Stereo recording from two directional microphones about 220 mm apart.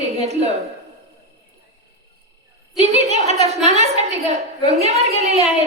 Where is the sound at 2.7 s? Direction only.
30° right (ahead or behind).